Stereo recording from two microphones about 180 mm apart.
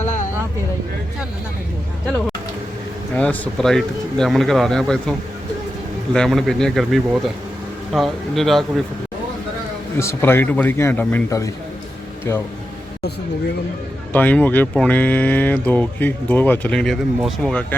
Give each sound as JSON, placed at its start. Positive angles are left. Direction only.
{"t": 0.0, "sound": "a sound", "side_deg": 40}
{"t": 3.2, "sound": "speech", "side_deg": 5}
{"t": 6.1, "sound": "speech", "side_deg": 0}
{"t": 10.0, "sound": "speech", "side_deg": 15}
{"t": 14.1, "sound": "speech", "side_deg": 10}